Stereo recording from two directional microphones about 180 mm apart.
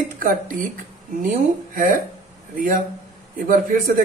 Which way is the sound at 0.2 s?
50° right (ahead or behind).